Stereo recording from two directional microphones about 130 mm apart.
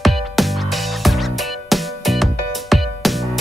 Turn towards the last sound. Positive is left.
turn(degrees=0)  # may be behind; listen again after turning